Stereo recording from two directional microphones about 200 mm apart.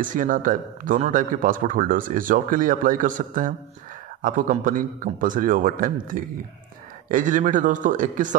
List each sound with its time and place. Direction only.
0.0 s a man's voice: 40° right (ahead or behind)